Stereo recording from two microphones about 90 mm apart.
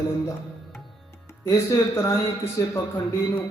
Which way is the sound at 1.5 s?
35° left (ahead or behind).